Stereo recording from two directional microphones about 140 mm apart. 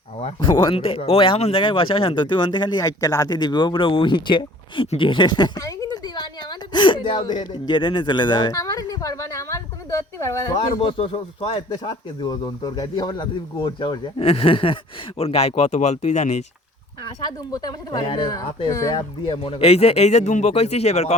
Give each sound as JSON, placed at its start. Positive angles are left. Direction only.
{"t": 0.3, "sound": "speech", "side_deg": 40}
{"t": 8.5, "sound": "a sound", "side_deg": 25}
{"t": 10.8, "sound": "speech", "side_deg": 40}
{"t": 17.2, "sound": "speech", "side_deg": 30}
{"t": 18.9, "sound": "speech", "side_deg": 40}